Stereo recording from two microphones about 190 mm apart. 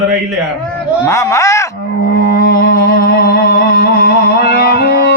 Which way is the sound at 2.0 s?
60° left (ahead or behind).